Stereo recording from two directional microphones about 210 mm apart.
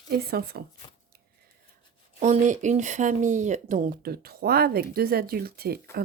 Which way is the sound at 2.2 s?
35° right (ahead or behind).